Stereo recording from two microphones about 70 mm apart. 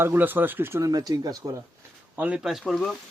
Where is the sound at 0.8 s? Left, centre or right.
Right.